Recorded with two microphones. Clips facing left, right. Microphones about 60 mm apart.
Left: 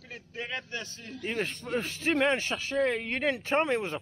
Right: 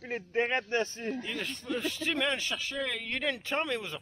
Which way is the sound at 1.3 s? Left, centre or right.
Left.